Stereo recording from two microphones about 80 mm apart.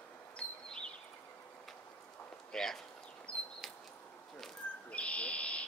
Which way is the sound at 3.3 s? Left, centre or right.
Centre.